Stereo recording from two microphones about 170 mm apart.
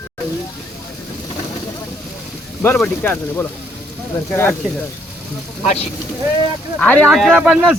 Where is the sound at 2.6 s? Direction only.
10° left (ahead or behind).